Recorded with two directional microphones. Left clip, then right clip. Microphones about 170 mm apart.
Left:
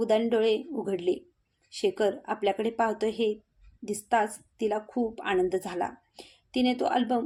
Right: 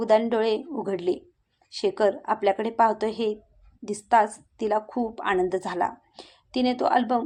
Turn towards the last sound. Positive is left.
turn(degrees=0)  # may be behind; listen again after turning